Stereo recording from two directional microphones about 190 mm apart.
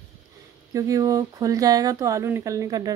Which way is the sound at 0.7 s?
15° right (ahead or behind).